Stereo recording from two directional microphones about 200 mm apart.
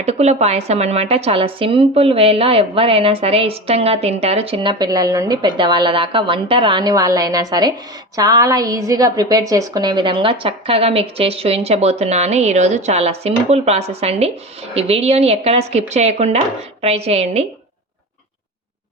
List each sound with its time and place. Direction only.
0.0 s a woman's voice: 35° right (ahead or behind)